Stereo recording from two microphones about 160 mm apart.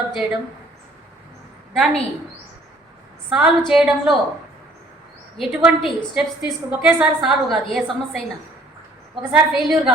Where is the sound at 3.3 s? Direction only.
5° right (ahead or behind).